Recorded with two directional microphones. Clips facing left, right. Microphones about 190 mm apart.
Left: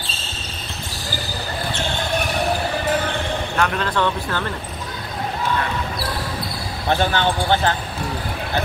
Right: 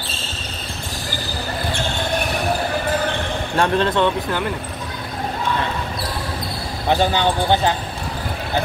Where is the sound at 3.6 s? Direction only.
30° right (ahead or behind).